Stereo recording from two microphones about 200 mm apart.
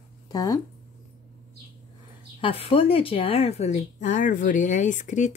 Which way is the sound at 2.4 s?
25° left (ahead or behind).